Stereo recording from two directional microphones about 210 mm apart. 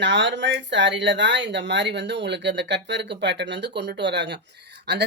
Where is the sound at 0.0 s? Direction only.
55° right (ahead or behind).